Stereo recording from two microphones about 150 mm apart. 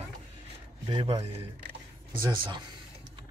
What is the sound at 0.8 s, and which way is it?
Speech, 35° right (ahead or behind).